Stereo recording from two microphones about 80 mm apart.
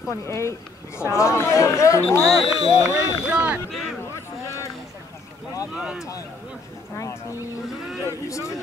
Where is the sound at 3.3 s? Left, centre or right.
Centre.